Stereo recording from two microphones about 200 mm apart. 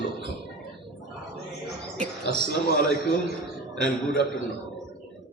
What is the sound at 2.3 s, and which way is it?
Speech, 60° right (ahead or behind).